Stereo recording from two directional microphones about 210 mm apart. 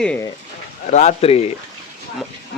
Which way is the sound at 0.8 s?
35° left (ahead or behind).